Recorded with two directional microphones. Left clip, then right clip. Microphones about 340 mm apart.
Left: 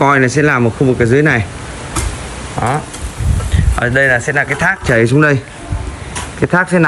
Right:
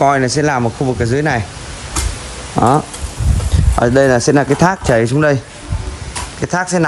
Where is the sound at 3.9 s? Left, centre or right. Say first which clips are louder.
Even; right.